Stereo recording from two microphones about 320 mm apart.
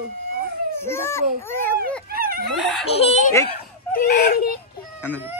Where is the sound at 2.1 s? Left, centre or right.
Right.